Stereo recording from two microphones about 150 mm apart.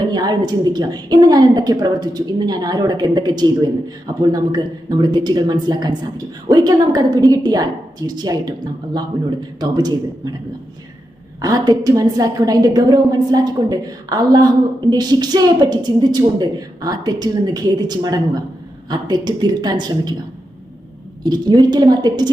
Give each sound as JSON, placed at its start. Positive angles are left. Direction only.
{"t": 0.1, "sound": "a woman's voice", "side_deg": -25}
{"t": 11.3, "sound": "a woman's voice", "side_deg": -25}
{"t": 21.2, "sound": "a woman's voice", "side_deg": -30}